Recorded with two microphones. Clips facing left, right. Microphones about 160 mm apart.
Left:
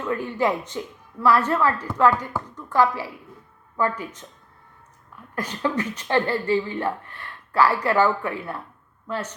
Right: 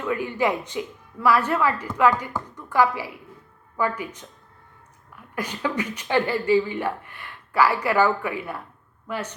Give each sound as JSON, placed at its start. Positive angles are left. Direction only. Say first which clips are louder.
{"t": 0.0, "sound": "speech", "louder": "even", "side_deg": -10}
{"t": 5.3, "sound": "a woman's voice", "louder": "left 2 dB", "side_deg": -10}